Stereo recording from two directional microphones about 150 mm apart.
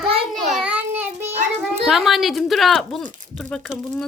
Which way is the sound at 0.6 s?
10° right (ahead or behind).